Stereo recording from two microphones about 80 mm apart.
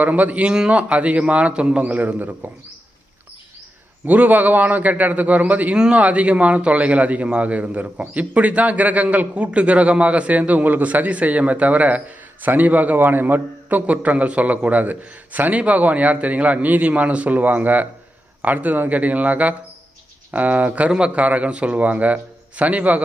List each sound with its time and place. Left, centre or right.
0.0 s speech: centre
4.0 s a man's voice: right